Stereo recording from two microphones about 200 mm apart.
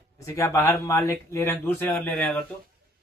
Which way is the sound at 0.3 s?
15° left (ahead or behind).